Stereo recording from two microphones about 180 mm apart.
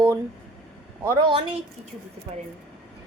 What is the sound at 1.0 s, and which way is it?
Speech, 15° right (ahead or behind).